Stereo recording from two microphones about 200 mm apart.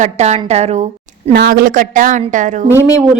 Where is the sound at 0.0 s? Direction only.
35° right (ahead or behind).